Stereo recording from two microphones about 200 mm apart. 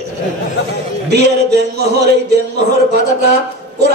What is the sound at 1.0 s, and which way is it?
Music, 55° right (ahead or behind).